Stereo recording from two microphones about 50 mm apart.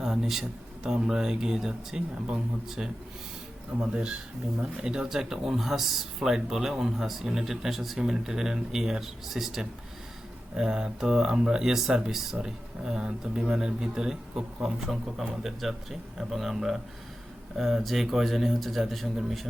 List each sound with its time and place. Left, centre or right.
0.0 s speech: centre
3.8 s speech: right; by 16.8 s centre
17.8 s a man's voice: centre